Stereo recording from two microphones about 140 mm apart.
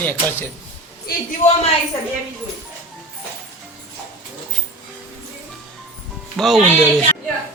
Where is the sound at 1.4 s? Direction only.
60° left (ahead or behind).